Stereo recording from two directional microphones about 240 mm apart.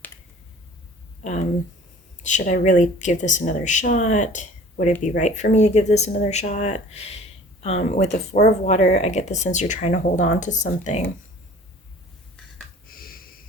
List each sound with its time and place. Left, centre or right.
2.2 s speech: left
12.9 s snort: left